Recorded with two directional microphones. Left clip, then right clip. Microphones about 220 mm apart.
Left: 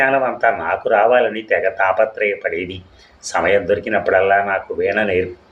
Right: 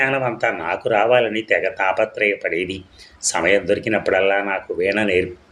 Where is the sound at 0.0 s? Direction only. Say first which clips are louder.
Left 4 dB; 30° right (ahead or behind).